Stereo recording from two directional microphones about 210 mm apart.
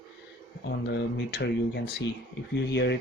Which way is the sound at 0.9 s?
50° left (ahead or behind).